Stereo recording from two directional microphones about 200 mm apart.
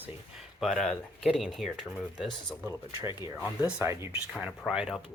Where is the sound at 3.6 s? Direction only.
15° right (ahead or behind).